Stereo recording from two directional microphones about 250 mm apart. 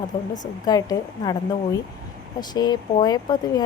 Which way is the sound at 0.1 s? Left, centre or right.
Centre.